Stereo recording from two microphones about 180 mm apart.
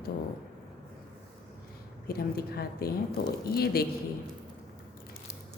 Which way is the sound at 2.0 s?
60° left (ahead or behind).